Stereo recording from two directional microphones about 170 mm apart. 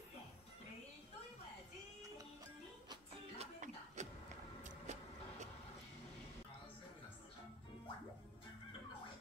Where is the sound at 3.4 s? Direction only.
45° right (ahead or behind).